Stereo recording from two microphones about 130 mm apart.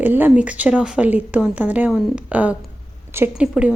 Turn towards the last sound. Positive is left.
turn(degrees=-5)  # may be behind; listen again after turning